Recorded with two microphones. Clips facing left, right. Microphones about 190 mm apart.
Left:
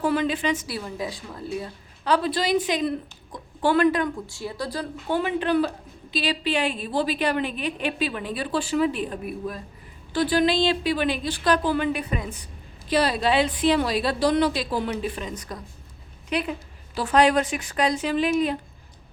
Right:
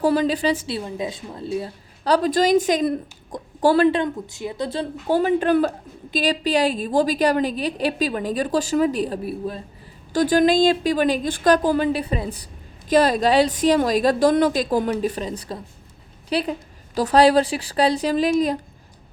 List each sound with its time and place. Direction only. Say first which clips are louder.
0.0 s a woman's voice: right 4 dB; 35° right (ahead or behind)
2.0 s a woman's voice: right 5 dB; 40° right (ahead or behind); by 4.9 s 25° right (ahead or behind)
5.0 s a woman's voice: right 6 dB; 40° right (ahead or behind)
10.1 s a woman's voice: right 4 dB; 45° right (ahead or behind)
12.9 s a woman's voice: right 5 dB; 45° right (ahead or behind)